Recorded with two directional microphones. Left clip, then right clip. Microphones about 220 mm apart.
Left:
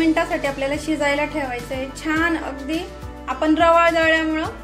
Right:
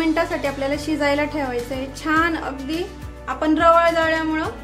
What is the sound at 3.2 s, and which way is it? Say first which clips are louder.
A woman's voice: even; 20° right (ahead or behind).